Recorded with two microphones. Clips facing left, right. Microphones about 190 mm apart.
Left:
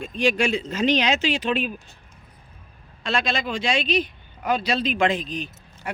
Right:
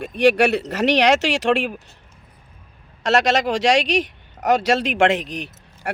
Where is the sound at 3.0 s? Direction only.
80° right.